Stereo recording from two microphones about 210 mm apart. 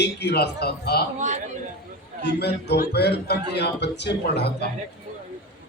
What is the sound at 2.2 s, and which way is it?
A man's voice, 50° left (ahead or behind).